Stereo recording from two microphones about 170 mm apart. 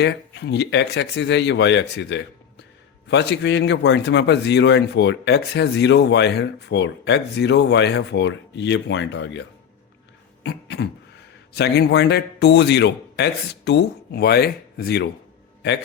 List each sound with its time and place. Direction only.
0.0 s a man's voice: 85° left
10.4 s a sound: 75° left (ahead or behind)
11.5 s speech: 75° left (ahead or behind)